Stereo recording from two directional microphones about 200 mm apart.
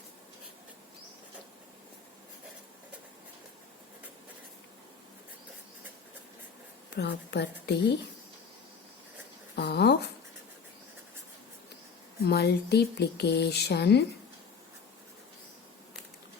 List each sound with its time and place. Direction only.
6.9 s speech: 60° left (ahead or behind)
9.6 s a sound: 55° left (ahead or behind)
12.2 s speech: 55° left (ahead or behind)